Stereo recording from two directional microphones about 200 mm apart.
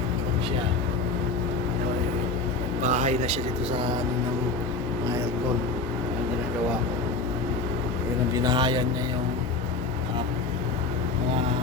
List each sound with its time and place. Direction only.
2.8 s speech: 35° right (ahead or behind)
8.4 s speech: 20° right (ahead or behind)